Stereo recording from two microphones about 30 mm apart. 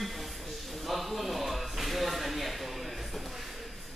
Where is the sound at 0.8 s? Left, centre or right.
Centre.